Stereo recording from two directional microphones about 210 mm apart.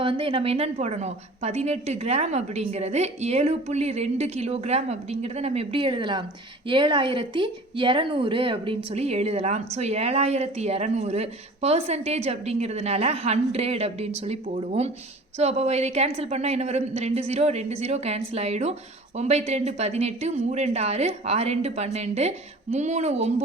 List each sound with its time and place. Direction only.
0.0 s a woman's voice: 25° right (ahead or behind)